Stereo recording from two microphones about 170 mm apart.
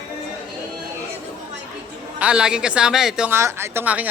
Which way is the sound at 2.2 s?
5° right (ahead or behind).